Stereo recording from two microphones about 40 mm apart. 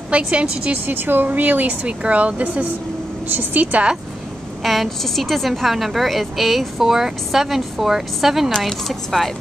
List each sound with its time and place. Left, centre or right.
0.1 s speech: right
0.8 s speech: right
1.9 s speech: right
3.3 s speech: right
4.8 s a woman's voice: centre
8.5 s speech: centre